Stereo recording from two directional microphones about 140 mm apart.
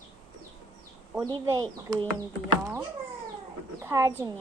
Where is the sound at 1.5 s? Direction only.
30° right (ahead or behind).